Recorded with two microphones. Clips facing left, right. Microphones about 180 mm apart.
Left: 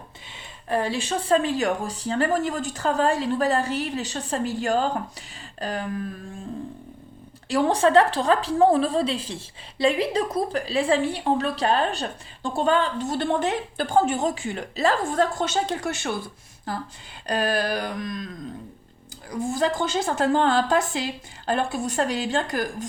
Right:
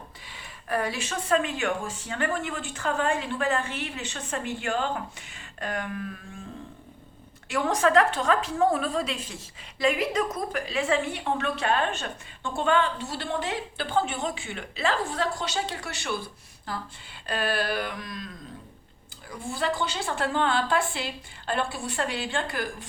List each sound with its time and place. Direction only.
0.3 s a woman's voice: 25° left (ahead or behind)
7.4 s a woman's voice: 30° left (ahead or behind); by 16.1 s 50° left (ahead or behind)
17.2 s a woman's voice: 40° left (ahead or behind)
19.3 s a woman's voice: 40° left (ahead or behind)